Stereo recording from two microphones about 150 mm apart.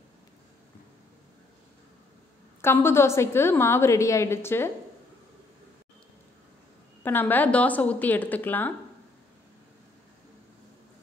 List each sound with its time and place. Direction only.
2.6 s a woman's voice: 15° left (ahead or behind)
7.0 s a woman's voice: 15° left (ahead or behind)